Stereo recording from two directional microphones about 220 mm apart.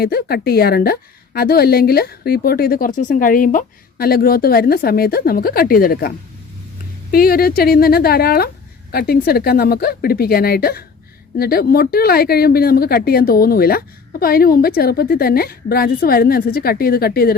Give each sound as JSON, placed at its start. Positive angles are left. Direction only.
{"t": 0.0, "sound": "a woman's voice", "side_deg": 45}